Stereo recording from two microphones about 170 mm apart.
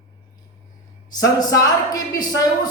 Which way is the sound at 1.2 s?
20° left (ahead or behind).